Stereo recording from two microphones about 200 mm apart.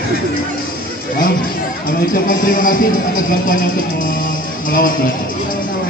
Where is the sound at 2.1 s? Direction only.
45° left (ahead or behind).